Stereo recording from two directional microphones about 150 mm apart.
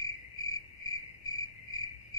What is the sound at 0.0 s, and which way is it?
Cricket, 20° left (ahead or behind).